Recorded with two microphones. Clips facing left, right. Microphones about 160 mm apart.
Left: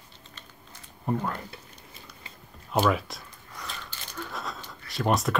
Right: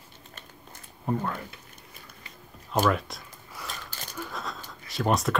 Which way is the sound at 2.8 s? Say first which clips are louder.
Right 1 dB; centre (ahead or behind).